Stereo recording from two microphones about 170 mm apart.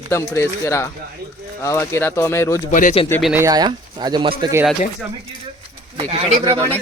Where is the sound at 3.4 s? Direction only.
20° right (ahead or behind).